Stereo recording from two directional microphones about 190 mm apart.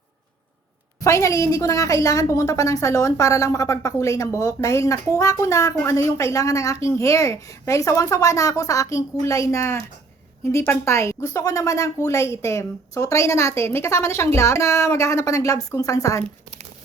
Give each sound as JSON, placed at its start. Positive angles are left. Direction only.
{"t": 1.0, "sound": "a woman's voice", "side_deg": 15}